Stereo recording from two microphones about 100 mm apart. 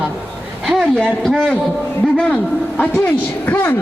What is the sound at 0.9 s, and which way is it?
A man's voice, 10° left (ahead or behind).